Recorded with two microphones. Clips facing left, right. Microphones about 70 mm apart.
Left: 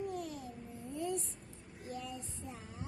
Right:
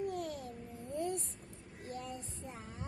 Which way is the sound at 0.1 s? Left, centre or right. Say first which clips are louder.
Right 2 dB; right.